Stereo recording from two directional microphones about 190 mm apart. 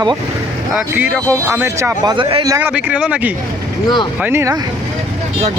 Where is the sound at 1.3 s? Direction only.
15° right (ahead or behind).